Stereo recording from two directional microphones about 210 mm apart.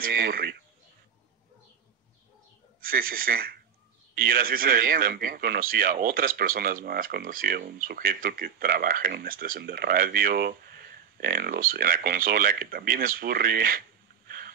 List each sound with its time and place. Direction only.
0.0 s a man's voice: 45° right (ahead or behind)
2.8 s a man's voice: 45° right (ahead or behind)